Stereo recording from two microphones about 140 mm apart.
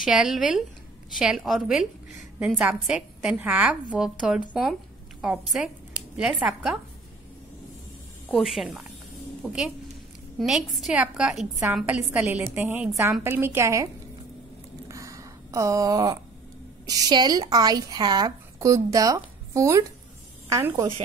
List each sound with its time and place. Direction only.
0.0 s a woman's voice: 5° right (ahead or behind)
8.3 s a woman's voice: centre (ahead or behind); by 13.8 s 20° right (ahead or behind)
14.9 s a sound: 20° right (ahead or behind)
16.8 s a woman's voice: 25° right (ahead or behind)